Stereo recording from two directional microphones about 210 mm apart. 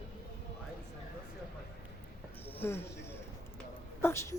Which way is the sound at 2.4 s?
10° left (ahead or behind).